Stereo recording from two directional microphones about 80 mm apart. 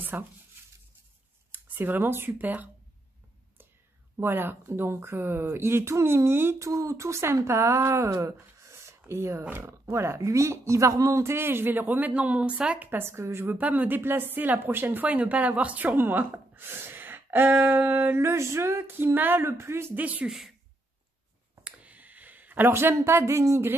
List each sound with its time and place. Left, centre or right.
0.0 s a sound: right
1.5 s speech: right
4.2 s speech: right
13.1 s speech: right
13.6 s speech: centre
20.0 s speech: centre
20.2 s speech: centre
21.6 s a sound: centre; by 23.7 s right